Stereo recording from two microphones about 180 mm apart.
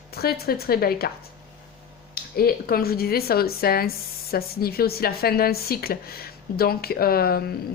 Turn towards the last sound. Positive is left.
turn(degrees=55)  # may be behind; listen again after turning